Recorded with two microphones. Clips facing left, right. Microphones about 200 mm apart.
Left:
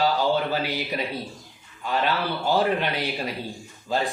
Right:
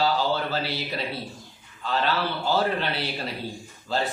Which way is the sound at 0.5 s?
15° left (ahead or behind).